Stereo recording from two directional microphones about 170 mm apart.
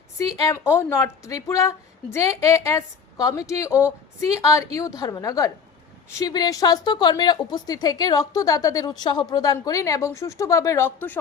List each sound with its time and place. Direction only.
0.2 s a woman's voice: 20° left (ahead or behind)